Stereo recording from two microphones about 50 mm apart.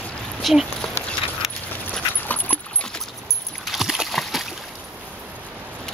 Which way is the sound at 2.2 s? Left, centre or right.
Left.